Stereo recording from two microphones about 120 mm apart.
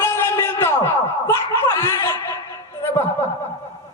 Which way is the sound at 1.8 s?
20° left (ahead or behind).